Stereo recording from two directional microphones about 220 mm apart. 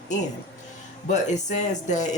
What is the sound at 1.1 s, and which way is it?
Speech, 35° left (ahead or behind).